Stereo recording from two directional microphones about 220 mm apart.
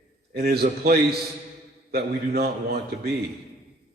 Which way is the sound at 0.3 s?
45° right (ahead or behind).